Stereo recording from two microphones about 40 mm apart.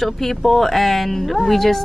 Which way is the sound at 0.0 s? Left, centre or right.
Centre.